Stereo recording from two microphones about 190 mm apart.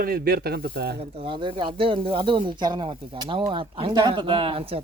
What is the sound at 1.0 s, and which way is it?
A man's voice, 30° right (ahead or behind).